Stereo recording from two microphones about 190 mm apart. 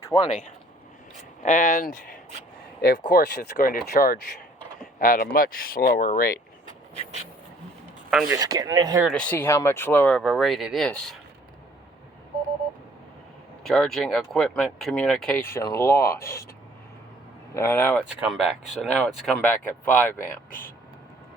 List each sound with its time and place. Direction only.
0.0 s speech: 25° left (ahead or behind)
1.4 s speech: 40° left (ahead or behind)
2.8 s speech: 60° left (ahead or behind)
8.1 s speech: 5° right (ahead or behind)
8.4 s speech: 20° right (ahead or behind)
9.0 s speech: 5° left (ahead or behind)
13.7 s speech: centre (ahead or behind)
15.4 s speech: 15° left (ahead or behind)
17.5 s speech: 15° left (ahead or behind)
18.1 s speech: 5° right (ahead or behind)
20.5 s speech: 50° left (ahead or behind)